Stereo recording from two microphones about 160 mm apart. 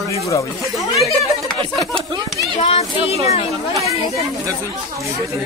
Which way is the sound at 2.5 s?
40° left (ahead or behind).